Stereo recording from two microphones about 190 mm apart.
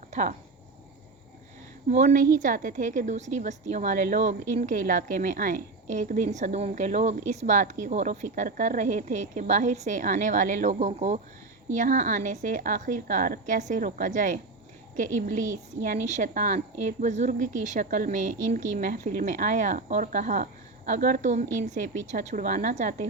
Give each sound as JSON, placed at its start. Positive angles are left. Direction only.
{"t": 0.1, "sound": "speech", "side_deg": -40}
{"t": 1.9, "sound": "a woman's voice", "side_deg": -40}